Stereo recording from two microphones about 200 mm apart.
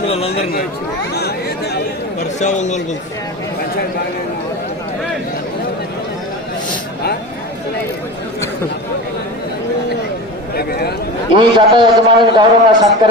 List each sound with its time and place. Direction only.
1.1 s chatter: 55° left (ahead or behind)
2.4 s speech: 35° left (ahead or behind)
10.5 s a sound: 50° left (ahead or behind)
11.3 s a man's voice: 25° right (ahead or behind)